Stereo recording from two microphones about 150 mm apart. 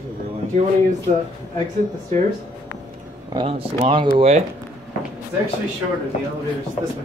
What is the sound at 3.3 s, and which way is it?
Speech, 35° right (ahead or behind).